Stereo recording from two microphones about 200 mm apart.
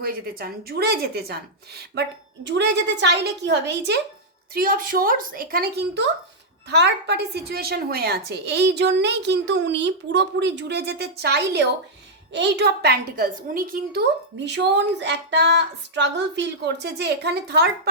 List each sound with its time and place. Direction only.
0.0 s a woman's voice: 50° right (ahead or behind)
4.5 s a woman's voice: 45° right (ahead or behind)
14.4 s a woman's voice: 60° right (ahead or behind)